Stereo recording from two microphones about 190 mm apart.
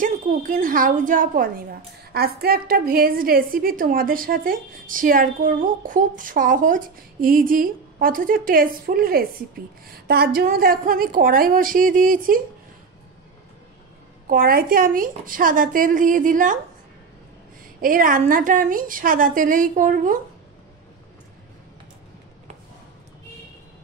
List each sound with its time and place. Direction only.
0.0 s a woman's voice: 45° right (ahead or behind)
14.3 s a woman's voice: 50° right (ahead or behind)
17.7 s a woman's voice: 45° right (ahead or behind)